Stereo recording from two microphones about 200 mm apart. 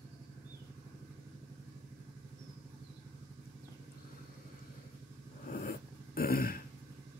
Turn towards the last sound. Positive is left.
turn(degrees=45)  # may be behind; listen again after turning